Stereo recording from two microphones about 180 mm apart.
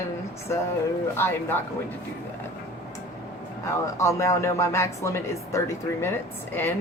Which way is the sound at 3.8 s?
15° left (ahead or behind).